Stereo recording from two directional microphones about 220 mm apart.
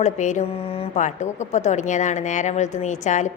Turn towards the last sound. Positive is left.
turn(degrees=35)  # may be behind; listen again after turning